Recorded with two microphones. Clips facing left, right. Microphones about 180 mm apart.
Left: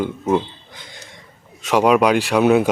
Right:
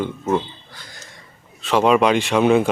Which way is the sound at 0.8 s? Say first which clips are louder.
Left 3 dB; 25° left (ahead or behind).